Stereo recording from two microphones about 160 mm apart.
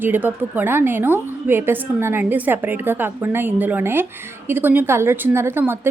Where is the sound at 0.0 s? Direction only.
10° right (ahead or behind).